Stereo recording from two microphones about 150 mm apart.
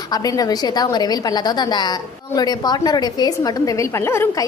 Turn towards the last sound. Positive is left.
turn(degrees=15)  # may be behind; listen again after turning